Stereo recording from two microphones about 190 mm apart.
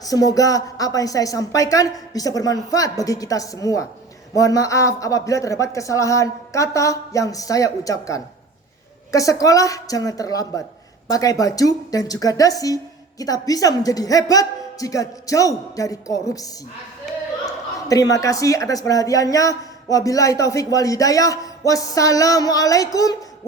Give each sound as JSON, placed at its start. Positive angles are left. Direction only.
{"t": 0.0, "sound": "a woman's voice", "side_deg": 20}